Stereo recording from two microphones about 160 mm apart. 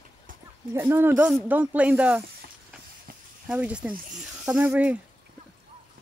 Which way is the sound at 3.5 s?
10° right (ahead or behind).